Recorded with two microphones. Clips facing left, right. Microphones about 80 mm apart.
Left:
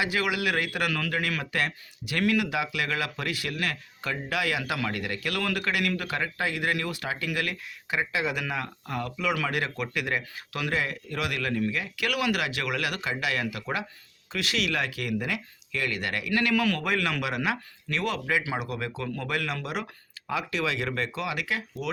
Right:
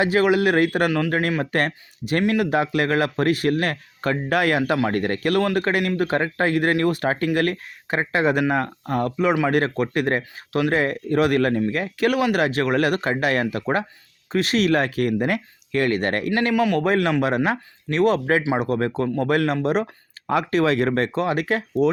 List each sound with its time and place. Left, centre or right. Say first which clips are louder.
0.0 s speech: right 9 dB; right
0.9 s speech: right 8 dB; right
1.5 s a man's voice: right 7 dB; right
16.3 s speech: right 4 dB; right
19.6 s a sound: right 12 dB; right
20.3 s a man's voice: right 10 dB; right